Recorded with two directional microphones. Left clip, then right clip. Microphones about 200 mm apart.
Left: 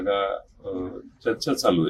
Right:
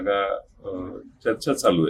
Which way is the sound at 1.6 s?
5° right (ahead or behind).